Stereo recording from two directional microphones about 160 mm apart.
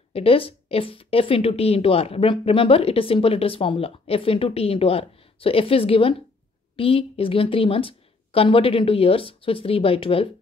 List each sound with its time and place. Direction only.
0.1 s a woman's voice: 35° left (ahead or behind)